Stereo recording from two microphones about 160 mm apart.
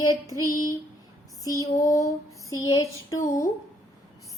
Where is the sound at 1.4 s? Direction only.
20° left (ahead or behind).